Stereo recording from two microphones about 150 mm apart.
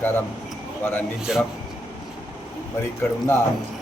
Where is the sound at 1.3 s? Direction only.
5° right (ahead or behind).